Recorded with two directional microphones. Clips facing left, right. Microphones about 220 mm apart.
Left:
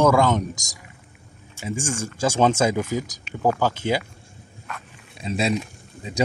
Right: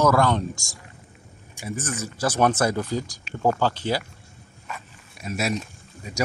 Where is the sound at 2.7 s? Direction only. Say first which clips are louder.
Left 2 dB; 15° left (ahead or behind).